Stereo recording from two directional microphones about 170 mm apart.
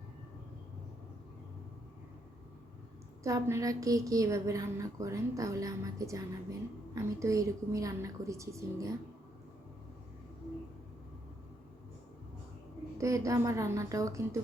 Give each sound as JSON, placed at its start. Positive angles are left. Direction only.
{"t": 3.2, "sound": "a woman's voice", "side_deg": -15}
{"t": 13.0, "sound": "a woman's voice", "side_deg": -20}